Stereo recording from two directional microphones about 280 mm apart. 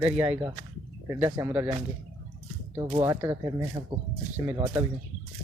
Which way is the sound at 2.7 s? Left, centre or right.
Centre.